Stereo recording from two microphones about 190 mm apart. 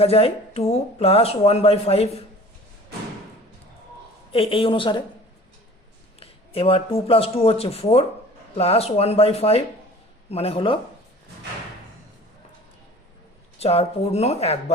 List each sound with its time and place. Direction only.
0.0 s speech: 30° left (ahead or behind)
4.3 s speech: 30° left (ahead or behind)
6.1 s speech: 30° left (ahead or behind)
13.6 s speech: 30° left (ahead or behind)